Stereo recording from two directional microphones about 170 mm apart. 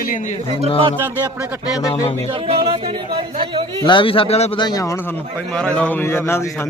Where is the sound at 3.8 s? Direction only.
30° left (ahead or behind).